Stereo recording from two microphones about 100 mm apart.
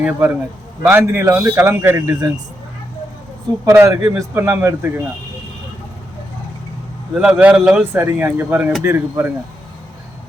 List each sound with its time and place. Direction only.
0.0 s a man's voice: 15° right (ahead or behind)
0.9 s a man's voice: 25° right (ahead or behind)
3.7 s a man's voice: 30° right (ahead or behind)
7.1 s a man's voice: 10° right (ahead or behind)
7.8 s a man's voice: 20° right (ahead or behind)